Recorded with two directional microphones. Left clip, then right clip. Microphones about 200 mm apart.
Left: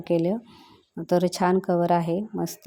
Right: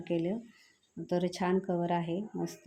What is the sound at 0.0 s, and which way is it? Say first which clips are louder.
A woman's voice: left 9 dB; 35° left (ahead or behind).